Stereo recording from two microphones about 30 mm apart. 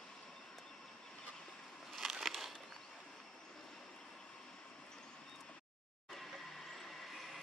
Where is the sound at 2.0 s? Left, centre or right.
Centre.